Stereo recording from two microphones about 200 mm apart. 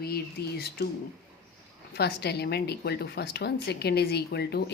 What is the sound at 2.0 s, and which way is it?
A woman's voice, 55° left (ahead or behind).